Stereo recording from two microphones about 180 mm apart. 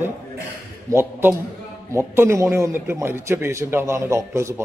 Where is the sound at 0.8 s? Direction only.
15° right (ahead or behind).